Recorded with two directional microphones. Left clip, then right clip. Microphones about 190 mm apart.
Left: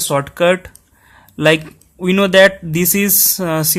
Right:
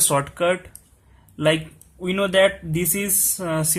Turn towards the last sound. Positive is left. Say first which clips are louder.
# left 7 dB
turn(degrees=40)  # may be behind; listen again after turning